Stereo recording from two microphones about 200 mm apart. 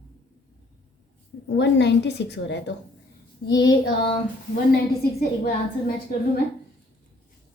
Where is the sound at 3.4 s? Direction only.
20° left (ahead or behind).